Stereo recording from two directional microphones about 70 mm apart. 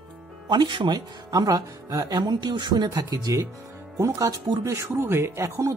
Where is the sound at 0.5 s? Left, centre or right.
Right.